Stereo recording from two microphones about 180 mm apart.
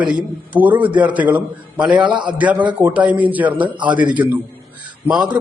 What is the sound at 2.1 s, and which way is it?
Speech, 25° right (ahead or behind).